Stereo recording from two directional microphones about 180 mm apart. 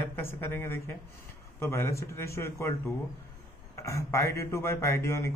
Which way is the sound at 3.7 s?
15° left (ahead or behind).